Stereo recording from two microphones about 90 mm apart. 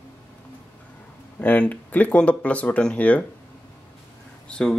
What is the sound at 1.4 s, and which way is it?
Speech, 20° left (ahead or behind).